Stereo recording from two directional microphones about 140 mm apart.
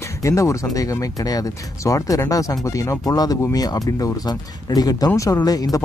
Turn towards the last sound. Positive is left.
turn(degrees=25)  # may be behind; listen again after turning